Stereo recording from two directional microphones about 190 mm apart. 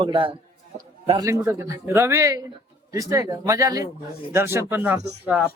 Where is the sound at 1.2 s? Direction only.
15° right (ahead or behind).